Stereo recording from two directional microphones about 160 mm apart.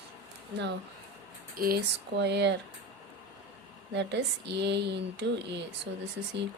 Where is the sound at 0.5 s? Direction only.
90° right.